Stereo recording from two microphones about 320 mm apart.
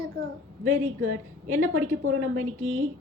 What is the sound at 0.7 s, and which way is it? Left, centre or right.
A woman's voice, right.